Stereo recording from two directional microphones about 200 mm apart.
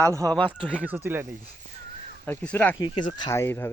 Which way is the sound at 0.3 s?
5° left (ahead or behind).